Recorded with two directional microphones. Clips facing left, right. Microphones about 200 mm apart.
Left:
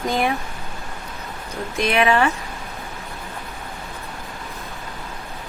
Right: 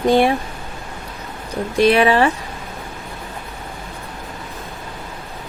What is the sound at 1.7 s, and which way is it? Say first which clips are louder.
Speech: right 5 dB; 35° right (ahead or behind).